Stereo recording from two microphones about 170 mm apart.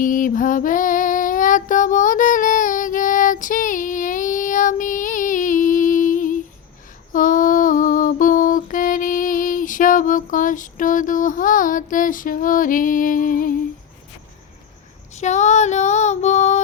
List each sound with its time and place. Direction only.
0.0 s female singing: 50° left (ahead or behind)
7.1 s lullaby: 50° left (ahead or behind)
15.1 s female singing: 45° left (ahead or behind)